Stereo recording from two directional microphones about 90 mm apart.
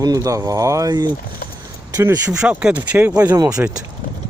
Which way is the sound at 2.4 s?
10° right (ahead or behind).